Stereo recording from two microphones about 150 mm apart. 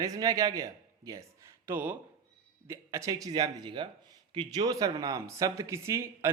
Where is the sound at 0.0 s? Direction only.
25° right (ahead or behind).